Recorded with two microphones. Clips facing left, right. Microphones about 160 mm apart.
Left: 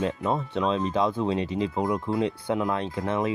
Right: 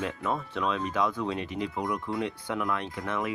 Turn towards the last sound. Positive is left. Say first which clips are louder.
# left 5 dB
turn(degrees=30)  # may be behind; listen again after turning